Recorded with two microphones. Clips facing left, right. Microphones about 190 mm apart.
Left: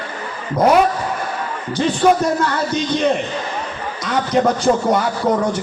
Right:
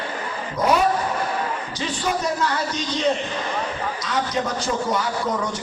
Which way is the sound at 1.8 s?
55° left (ahead or behind).